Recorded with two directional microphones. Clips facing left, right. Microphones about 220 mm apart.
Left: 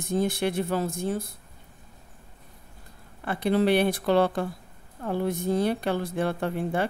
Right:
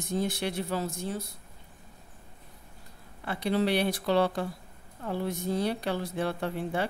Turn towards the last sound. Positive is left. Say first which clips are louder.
# left 4 dB
turn(degrees=50)  # may be behind; listen again after turning